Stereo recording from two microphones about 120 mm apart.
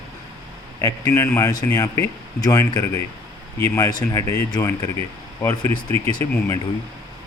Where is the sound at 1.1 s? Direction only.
25° left (ahead or behind).